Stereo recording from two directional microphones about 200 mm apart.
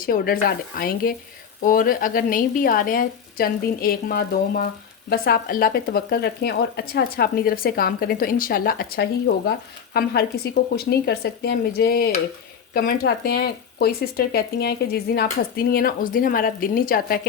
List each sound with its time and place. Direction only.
0.0 s a woman's voice: 45° left (ahead or behind)